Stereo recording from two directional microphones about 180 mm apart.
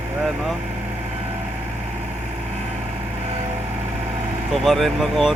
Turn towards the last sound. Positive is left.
turn(degrees=0)  # may be behind; listen again after turning